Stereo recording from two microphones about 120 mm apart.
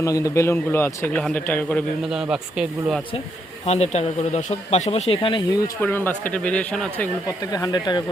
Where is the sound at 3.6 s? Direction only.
65° left (ahead or behind).